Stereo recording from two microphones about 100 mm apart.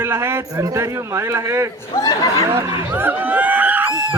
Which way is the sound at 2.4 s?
25° right (ahead or behind).